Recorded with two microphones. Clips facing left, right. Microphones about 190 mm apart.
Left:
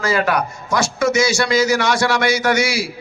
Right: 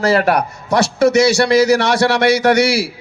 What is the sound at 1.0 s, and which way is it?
A man's voice, 65° right (ahead or behind).